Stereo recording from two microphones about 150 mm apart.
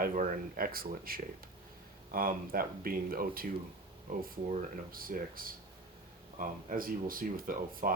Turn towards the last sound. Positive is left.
turn(degrees=-70)  # may be behind; listen again after turning